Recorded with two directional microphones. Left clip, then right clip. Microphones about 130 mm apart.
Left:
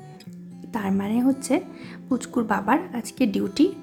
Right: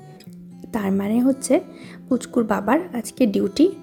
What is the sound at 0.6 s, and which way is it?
Speech, 30° right (ahead or behind).